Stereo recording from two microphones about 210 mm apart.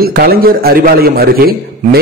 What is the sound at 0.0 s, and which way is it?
A man's voice, 45° right (ahead or behind).